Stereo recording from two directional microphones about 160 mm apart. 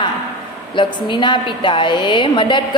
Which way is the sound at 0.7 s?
30° left (ahead or behind).